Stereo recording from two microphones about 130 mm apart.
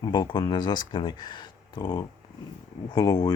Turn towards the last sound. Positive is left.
turn(degrees=30)  # may be behind; listen again after turning